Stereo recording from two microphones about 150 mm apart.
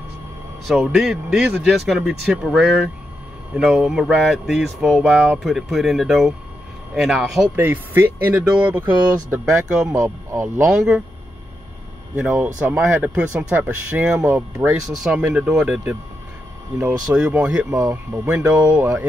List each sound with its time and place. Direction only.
0.7 s speech: centre (ahead or behind)
7.5 s speech: 15° right (ahead or behind)
12.2 s speech: 10° right (ahead or behind)
17.1 s speech: 10° right (ahead or behind)